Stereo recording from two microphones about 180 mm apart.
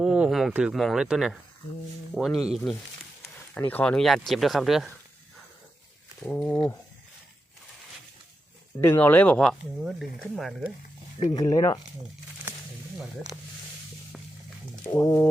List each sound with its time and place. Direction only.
0.0 s speech: 5° right (ahead or behind)
3.5 s speech: 10° left (ahead or behind)
6.2 s speech: 10° left (ahead or behind)
8.8 s speech: 10° left (ahead or behind)
11.2 s speech: 25° left (ahead or behind)
14.8 s speech: 15° left (ahead or behind)